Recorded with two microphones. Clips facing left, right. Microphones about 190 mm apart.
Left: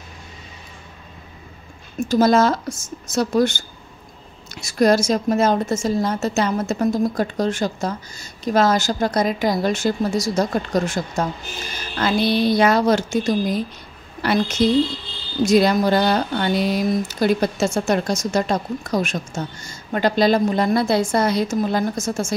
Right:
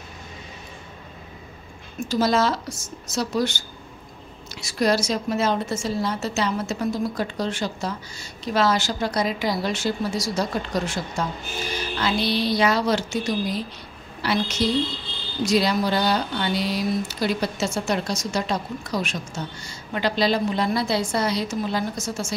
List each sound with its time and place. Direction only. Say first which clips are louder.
2.0 s speech: left 6 dB; 50° left (ahead or behind)